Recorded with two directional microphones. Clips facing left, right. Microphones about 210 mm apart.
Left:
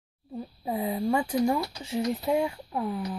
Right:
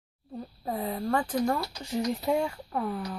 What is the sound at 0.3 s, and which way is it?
Speech, 10° left (ahead or behind).